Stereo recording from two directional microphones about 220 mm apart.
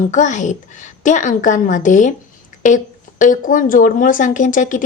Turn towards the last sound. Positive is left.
turn(degrees=35)  # may be behind; listen again after turning